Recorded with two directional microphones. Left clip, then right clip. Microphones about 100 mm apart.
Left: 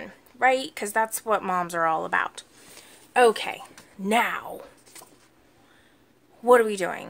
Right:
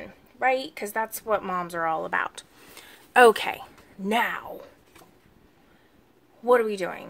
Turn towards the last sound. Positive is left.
turn(degrees=35)  # may be behind; listen again after turning